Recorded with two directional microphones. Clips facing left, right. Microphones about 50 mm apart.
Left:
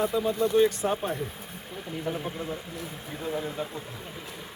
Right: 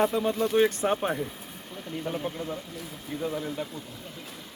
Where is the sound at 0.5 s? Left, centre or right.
Right.